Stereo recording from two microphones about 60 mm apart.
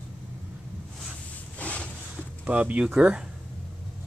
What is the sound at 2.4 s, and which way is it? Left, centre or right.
Speech, right.